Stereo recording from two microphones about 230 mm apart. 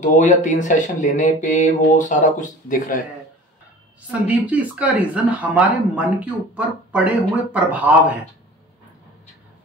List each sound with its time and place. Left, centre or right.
0.0 s speech: left
4.1 s speech: centre